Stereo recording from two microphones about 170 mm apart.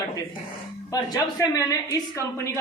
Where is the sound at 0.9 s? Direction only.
20° left (ahead or behind).